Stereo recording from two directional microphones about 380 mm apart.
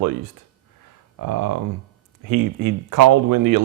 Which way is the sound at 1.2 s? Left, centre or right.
Right.